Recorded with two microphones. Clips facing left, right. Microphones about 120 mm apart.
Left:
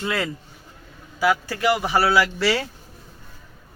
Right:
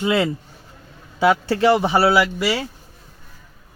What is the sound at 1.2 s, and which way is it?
Speech, 25° right (ahead or behind).